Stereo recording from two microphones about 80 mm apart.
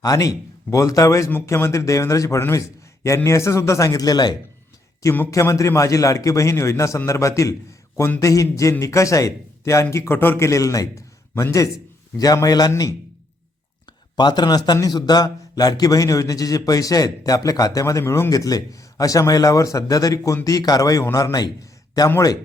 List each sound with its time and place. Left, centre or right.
0.0 s a man's voice: left
5.3 s a man's voice: left
14.2 s a man's voice: left
18.0 s a man's voice: left
18.3 s a man's voice: left